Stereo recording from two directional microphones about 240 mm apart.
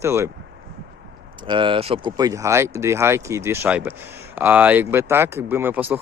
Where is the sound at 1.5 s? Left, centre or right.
Right.